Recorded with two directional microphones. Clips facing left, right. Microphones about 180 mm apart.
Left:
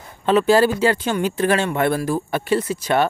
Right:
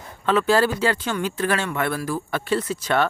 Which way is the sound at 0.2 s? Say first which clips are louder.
Left 4 dB; 20° left (ahead or behind).